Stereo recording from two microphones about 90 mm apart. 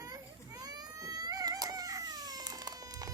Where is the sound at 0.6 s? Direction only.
45° right (ahead or behind).